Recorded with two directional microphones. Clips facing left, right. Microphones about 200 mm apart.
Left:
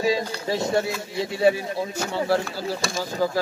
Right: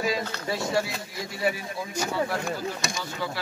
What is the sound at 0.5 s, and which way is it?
A man's voice, 25° left (ahead or behind).